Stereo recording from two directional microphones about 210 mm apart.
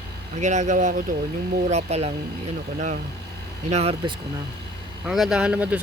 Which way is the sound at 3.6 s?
30° right (ahead or behind).